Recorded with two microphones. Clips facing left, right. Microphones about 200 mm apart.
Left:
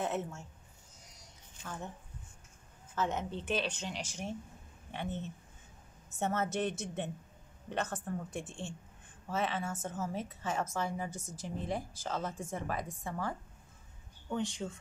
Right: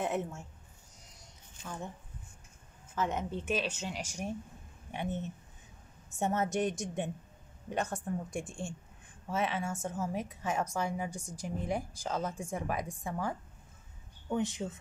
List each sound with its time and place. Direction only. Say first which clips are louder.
0.0 s speech: right 2 dB; 15° right (ahead or behind)
1.6 s speech: right 1 dB; 10° right (ahead or behind)
3.0 s speech: right 1 dB; 10° right (ahead or behind)
12.2 s speech: right 4 dB; centre (ahead or behind)
12.5 s speech: right 2 dB; 15° right (ahead or behind)
14.3 s speech: right 3 dB; 20° right (ahead or behind)